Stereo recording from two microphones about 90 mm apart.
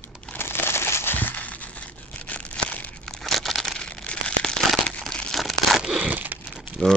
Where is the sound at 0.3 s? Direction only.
25° left (ahead or behind).